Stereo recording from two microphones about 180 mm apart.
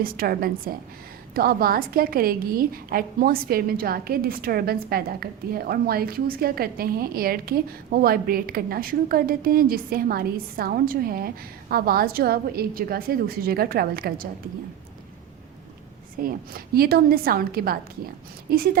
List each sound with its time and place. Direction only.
0.0 s a woman's voice: 55° right (ahead or behind)
16.2 s a woman's voice: 55° right (ahead or behind)